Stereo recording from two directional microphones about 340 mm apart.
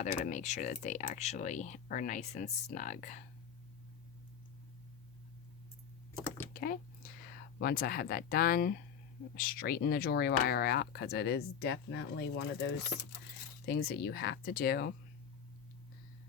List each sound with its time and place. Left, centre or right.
0.3 s speech: left
6.5 s a sound: left
7.6 s speech: left